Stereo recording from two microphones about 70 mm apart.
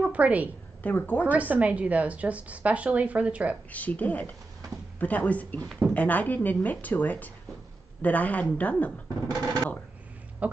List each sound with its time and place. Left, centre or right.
0.0 s a woman's voice: right
0.8 s a woman's voice: left
1.2 s a woman's voice: right
3.7 s a woman's voice: left
9.3 s speech: right
10.4 s a sound: right